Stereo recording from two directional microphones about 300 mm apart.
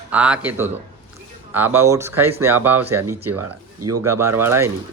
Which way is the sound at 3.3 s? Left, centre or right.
Right.